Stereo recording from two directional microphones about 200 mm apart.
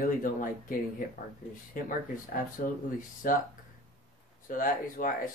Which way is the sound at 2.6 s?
45° left (ahead or behind).